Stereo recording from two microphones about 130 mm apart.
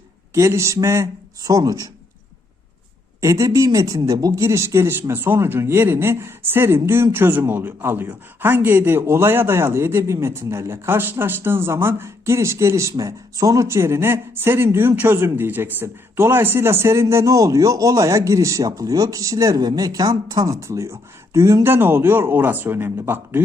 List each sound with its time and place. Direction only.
0.3 s speech: 20° right (ahead or behind)
3.2 s speech: 25° right (ahead or behind)